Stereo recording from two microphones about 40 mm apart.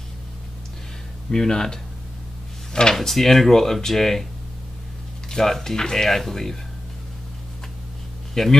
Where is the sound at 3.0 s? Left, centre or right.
Centre.